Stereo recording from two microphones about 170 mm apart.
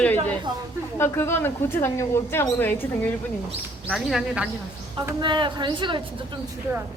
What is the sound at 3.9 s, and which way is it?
Speech, centre (ahead or behind).